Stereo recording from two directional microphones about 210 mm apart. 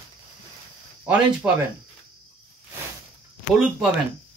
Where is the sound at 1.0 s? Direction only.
5° right (ahead or behind).